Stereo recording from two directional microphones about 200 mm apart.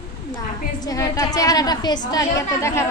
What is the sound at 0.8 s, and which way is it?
A woman's voice, 15° left (ahead or behind).